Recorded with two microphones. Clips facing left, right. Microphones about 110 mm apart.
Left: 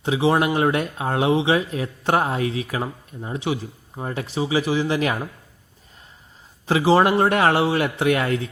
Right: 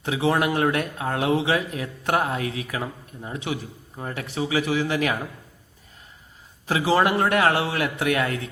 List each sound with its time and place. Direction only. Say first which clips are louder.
0.0 s speech: left 3 dB; 25° left (ahead or behind)
6.7 s speech: left 4 dB; 25° left (ahead or behind)